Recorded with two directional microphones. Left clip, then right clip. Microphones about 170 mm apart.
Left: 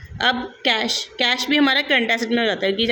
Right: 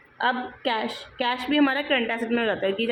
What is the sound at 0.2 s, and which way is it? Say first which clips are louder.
A woman's voice: left 5 dB; 55° left (ahead or behind).